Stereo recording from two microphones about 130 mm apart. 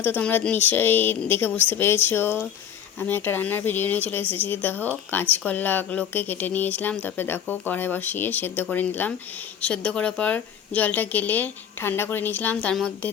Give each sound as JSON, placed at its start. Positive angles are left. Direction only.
{"t": 0.0, "sound": "speech", "side_deg": 15}